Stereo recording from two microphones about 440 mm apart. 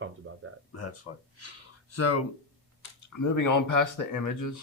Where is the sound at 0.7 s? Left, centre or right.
Left.